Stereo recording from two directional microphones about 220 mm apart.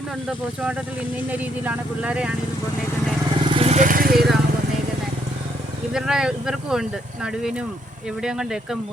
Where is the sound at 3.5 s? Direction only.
25° right (ahead or behind).